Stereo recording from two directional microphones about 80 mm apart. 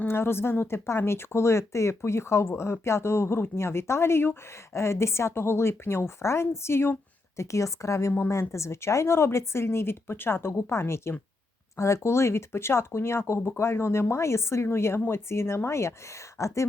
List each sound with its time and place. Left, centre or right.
0.1 s speech: left